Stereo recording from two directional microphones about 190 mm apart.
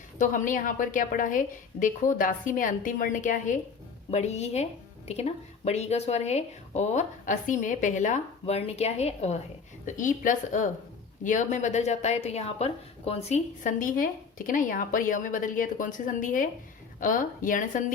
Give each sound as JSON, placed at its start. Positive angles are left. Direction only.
{"t": 0.2, "sound": "a woman's voice", "side_deg": 45}